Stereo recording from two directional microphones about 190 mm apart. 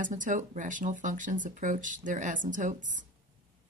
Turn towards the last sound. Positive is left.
turn(degrees=-40)  # may be behind; listen again after turning